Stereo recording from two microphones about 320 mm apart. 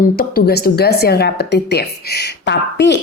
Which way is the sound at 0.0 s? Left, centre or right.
Left.